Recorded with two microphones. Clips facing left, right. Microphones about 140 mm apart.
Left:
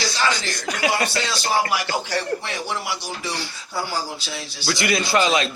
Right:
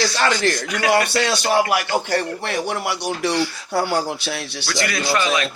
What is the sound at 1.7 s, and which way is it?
Speech, 50° right (ahead or behind).